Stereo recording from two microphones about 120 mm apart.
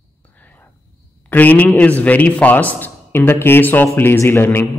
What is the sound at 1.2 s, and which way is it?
A man's voice, 15° left (ahead or behind).